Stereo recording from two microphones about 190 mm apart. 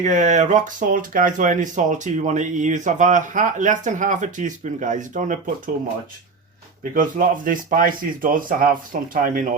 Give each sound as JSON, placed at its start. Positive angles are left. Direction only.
{"t": 0.0, "sound": "speech", "side_deg": -40}
{"t": 6.9, "sound": "speech", "side_deg": -45}